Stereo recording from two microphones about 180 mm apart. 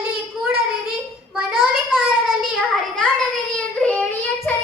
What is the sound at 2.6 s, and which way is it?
Child singing, 5° left (ahead or behind).